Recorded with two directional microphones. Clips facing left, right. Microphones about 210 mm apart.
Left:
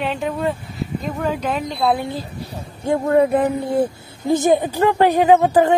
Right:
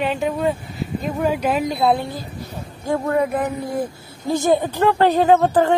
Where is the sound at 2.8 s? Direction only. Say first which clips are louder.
Left 4 dB; 25° left (ahead or behind).